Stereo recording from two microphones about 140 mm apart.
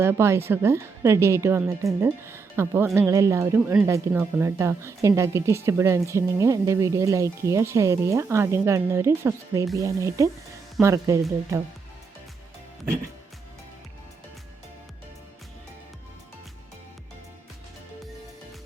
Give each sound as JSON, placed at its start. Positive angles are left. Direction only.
{"t": 0.0, "sound": "a woman's voice", "side_deg": -20}